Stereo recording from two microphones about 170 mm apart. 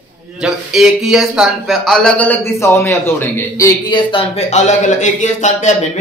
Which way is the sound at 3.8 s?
30° left (ahead or behind).